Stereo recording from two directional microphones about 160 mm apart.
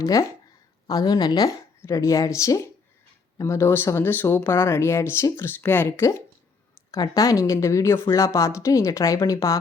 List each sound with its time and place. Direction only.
0.0 s speech: 20° left (ahead or behind)